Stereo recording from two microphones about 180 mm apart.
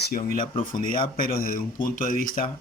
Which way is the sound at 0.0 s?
55° left (ahead or behind).